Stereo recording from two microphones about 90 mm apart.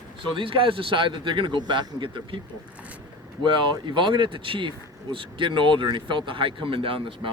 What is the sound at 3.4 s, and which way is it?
Speech, 60° right (ahead or behind).